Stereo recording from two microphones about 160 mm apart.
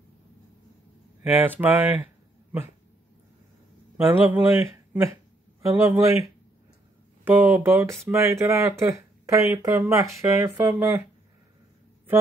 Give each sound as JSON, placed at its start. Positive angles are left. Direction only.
{"t": 1.3, "sound": "speech", "side_deg": -10}
{"t": 3.9, "sound": "speech", "side_deg": -15}
{"t": 7.2, "sound": "speech", "side_deg": -15}